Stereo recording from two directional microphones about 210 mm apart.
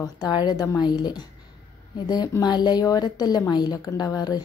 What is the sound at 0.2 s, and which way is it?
A woman's voice, 20° left (ahead or behind).